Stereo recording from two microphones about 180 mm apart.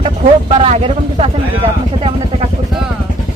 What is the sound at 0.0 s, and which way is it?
Speech, 35° right (ahead or behind).